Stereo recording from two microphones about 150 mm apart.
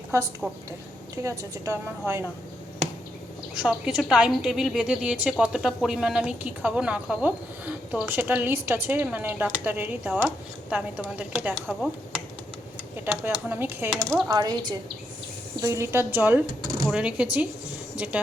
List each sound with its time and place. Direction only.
0.4 s a woman's voice: 10° right (ahead or behind)
3.5 s a woman's voice: 5° right (ahead or behind)
13.1 s a woman's voice: 15° right (ahead or behind)
14.3 s a woman's voice: 25° right (ahead or behind)
16.6 s a sound: 25° right (ahead or behind)
16.9 s a woman's voice: 5° right (ahead or behind)